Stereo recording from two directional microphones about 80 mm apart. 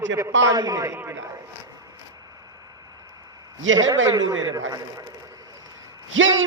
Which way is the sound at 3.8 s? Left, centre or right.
Right.